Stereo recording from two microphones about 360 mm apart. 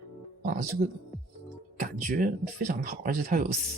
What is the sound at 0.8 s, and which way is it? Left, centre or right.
Speech, right.